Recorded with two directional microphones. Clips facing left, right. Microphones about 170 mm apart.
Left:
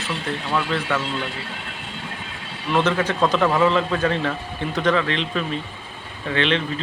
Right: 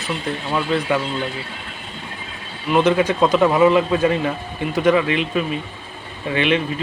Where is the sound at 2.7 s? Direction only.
10° right (ahead or behind).